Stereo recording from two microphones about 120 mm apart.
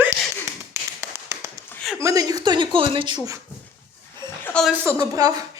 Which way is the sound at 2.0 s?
30° right (ahead or behind).